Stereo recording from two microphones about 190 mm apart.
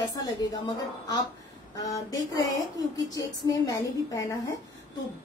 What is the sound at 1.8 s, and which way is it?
A woman's voice, 20° left (ahead or behind).